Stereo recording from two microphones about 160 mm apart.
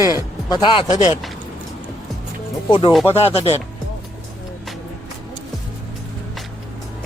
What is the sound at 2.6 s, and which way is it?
Speech, 30° left (ahead or behind).